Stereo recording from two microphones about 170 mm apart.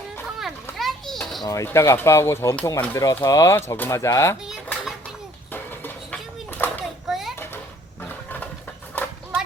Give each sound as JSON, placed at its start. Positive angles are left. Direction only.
{"t": 0.3, "sound": "children playing", "side_deg": 0}
{"t": 1.5, "sound": "speech", "side_deg": 15}
{"t": 5.5, "sound": "music", "side_deg": 10}
{"t": 7.1, "sound": "children playing", "side_deg": 0}
{"t": 8.0, "sound": "a sound", "side_deg": 10}
{"t": 9.0, "sound": "horse", "side_deg": 10}